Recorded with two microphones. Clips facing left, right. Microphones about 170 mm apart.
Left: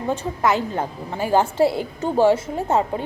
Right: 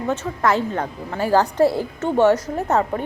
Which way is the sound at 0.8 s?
20° left (ahead or behind).